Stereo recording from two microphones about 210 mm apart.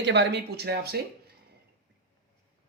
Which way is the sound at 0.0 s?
55° right (ahead or behind).